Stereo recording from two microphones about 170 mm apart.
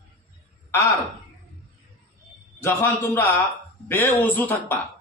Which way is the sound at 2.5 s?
15° left (ahead or behind).